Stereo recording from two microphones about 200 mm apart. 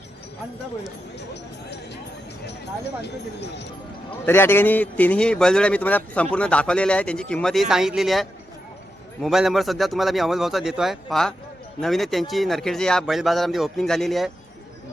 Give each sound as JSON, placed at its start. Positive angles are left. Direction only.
{"t": 3.0, "sound": "speech", "side_deg": 60}
{"t": 4.3, "sound": "speech", "side_deg": 10}